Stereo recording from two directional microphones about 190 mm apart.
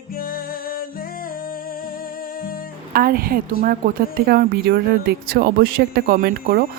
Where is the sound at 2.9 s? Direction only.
50° right (ahead or behind).